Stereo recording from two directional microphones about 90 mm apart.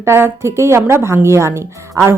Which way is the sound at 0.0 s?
30° right (ahead or behind).